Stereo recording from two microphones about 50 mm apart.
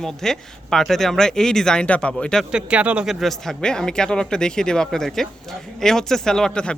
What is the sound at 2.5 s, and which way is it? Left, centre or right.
Speech, right.